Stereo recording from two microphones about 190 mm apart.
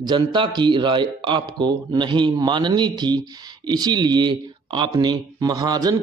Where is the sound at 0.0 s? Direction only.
25° right (ahead or behind).